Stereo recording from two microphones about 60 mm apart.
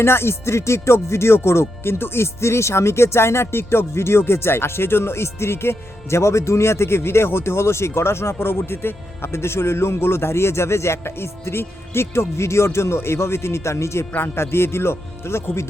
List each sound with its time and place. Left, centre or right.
0.0 s speech: left